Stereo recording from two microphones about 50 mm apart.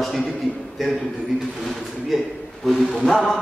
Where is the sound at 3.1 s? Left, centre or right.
Centre.